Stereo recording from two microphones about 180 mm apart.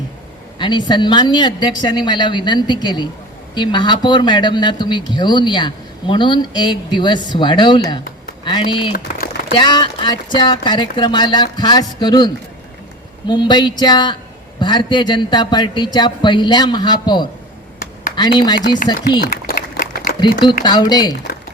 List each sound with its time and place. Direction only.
0.6 s speech: 25° left (ahead or behind)
19.2 s a sound: 55° left (ahead or behind)
20.7 s speech: 25° left (ahead or behind)